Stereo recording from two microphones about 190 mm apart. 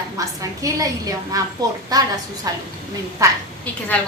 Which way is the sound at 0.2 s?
20° right (ahead or behind).